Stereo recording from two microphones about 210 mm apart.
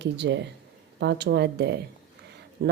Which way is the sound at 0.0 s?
55° right (ahead or behind).